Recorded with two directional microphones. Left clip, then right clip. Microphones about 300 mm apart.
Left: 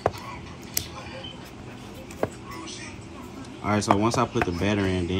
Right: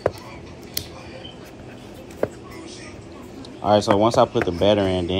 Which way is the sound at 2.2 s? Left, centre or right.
Centre.